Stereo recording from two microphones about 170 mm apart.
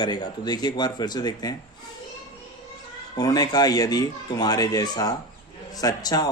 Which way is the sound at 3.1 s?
20° left (ahead or behind).